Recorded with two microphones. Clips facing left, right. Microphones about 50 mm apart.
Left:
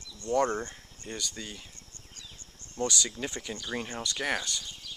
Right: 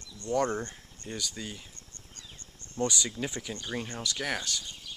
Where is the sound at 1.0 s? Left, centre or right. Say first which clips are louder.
Right 1 dB; centre.